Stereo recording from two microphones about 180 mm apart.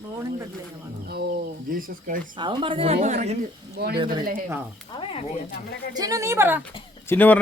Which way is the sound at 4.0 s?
25° right (ahead or behind).